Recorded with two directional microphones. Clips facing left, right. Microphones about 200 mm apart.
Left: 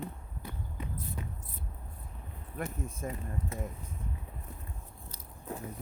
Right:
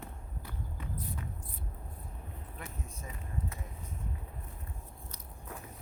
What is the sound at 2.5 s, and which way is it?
Speech, 50° left (ahead or behind).